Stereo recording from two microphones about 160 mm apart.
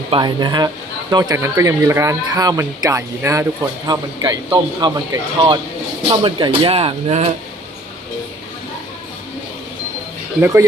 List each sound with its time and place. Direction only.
0.1 s speech: 30° right (ahead or behind)
10.4 s speech: 15° right (ahead or behind)